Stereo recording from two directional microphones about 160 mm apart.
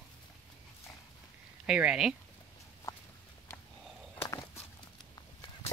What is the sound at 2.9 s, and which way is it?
Walk, 20° left (ahead or behind).